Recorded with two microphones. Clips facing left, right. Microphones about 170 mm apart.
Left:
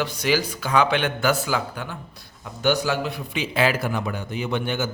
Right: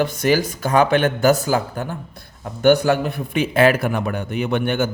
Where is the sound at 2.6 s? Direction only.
55° right (ahead or behind).